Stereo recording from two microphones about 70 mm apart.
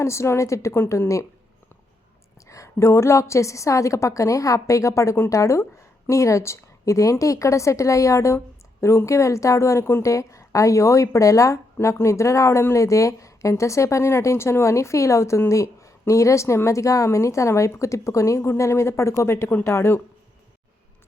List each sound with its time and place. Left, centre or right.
0.0 s a woman's voice: left
2.5 s a woman's voice: left